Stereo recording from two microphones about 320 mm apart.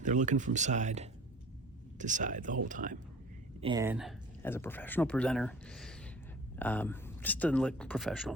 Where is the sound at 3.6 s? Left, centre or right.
Centre.